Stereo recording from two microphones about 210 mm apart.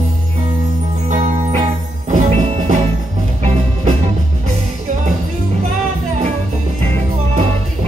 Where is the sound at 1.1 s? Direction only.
30° right (ahead or behind).